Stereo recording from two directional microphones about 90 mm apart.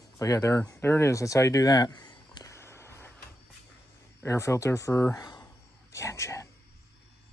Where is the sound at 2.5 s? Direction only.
30° left (ahead or behind).